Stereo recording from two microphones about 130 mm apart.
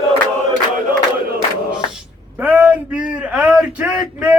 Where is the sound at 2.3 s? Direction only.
15° right (ahead or behind).